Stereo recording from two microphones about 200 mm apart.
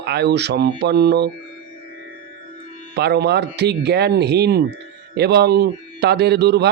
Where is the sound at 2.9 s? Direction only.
55° right (ahead or behind).